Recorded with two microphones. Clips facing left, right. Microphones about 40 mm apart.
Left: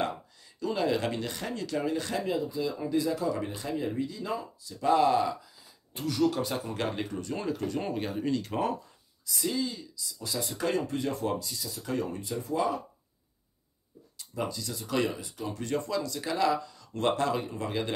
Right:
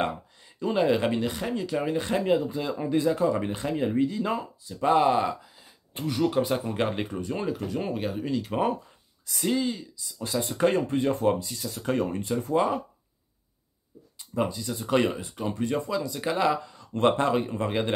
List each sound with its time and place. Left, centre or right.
0.6 s speech: right
2.2 s speech: right; by 8.7 s centre
9.2 s speech: right
14.1 s speech: right
15.7 s speech: centre
16.2 s speech: right